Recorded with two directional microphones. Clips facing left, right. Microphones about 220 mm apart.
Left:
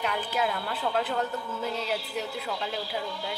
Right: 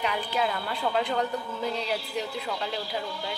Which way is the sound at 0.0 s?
Centre (ahead or behind).